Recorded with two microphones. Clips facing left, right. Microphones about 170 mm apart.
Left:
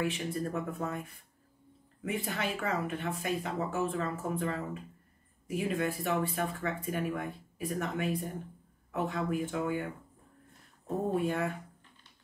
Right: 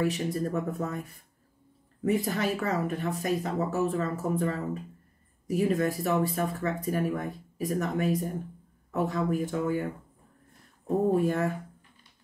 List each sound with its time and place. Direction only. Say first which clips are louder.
0.0 s speech: right 5 dB; 40° right (ahead or behind)
2.0 s speech: right 7 dB; 40° right (ahead or behind)
11.1 s speech: right 4 dB; 40° right (ahead or behind)